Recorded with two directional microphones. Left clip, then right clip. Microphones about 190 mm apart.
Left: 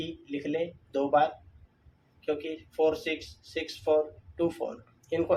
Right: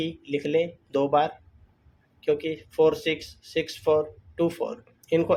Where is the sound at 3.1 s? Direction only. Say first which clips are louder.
Right 5 dB; 60° right (ahead or behind).